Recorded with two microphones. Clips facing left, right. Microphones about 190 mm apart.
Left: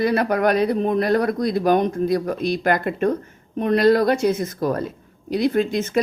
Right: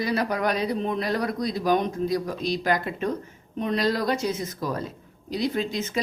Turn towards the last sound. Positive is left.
turn(degrees=55)  # may be behind; listen again after turning